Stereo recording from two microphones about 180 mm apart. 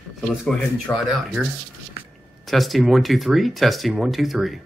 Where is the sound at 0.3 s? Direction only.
5° left (ahead or behind).